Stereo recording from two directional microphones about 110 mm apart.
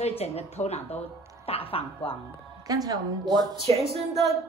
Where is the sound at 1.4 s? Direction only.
60° left (ahead or behind).